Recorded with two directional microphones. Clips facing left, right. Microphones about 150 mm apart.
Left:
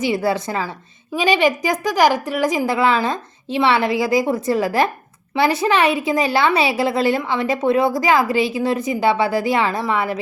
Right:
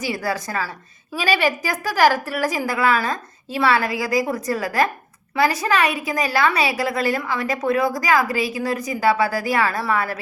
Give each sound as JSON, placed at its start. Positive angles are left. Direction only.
{"t": 0.0, "sound": "a woman's voice", "side_deg": 25}